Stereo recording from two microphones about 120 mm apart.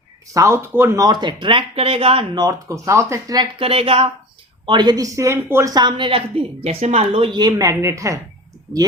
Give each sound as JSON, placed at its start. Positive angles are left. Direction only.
{"t": 0.3, "sound": "speech", "side_deg": -20}
{"t": 1.0, "sound": "speech", "side_deg": -40}
{"t": 2.3, "sound": "speech", "side_deg": -30}
{"t": 3.6, "sound": "speech", "side_deg": -50}
{"t": 4.6, "sound": "speech", "side_deg": -40}
{"t": 5.7, "sound": "speech", "side_deg": -40}